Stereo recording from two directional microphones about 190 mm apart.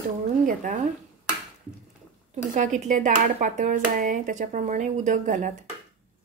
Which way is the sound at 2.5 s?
40° right (ahead or behind).